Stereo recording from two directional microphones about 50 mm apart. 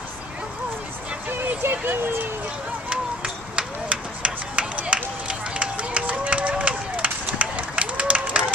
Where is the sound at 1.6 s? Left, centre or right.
Right.